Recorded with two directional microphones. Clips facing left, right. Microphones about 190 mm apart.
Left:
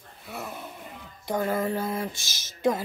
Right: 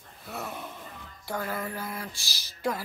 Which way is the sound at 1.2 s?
20° left (ahead or behind).